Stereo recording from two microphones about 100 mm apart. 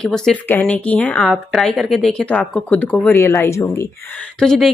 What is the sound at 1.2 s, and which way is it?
Speech, 5° right (ahead or behind).